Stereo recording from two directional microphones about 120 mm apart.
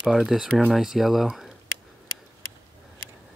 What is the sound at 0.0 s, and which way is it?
Speech, 5° right (ahead or behind).